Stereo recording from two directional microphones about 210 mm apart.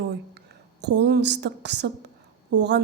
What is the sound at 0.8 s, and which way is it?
A woman's voice, 55° right (ahead or behind).